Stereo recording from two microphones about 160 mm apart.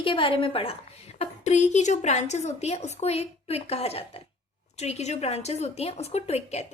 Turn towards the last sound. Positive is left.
turn(degrees=40)  # may be behind; listen again after turning